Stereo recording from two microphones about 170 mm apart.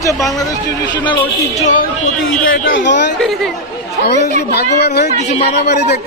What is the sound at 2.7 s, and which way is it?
Speech, 90° left.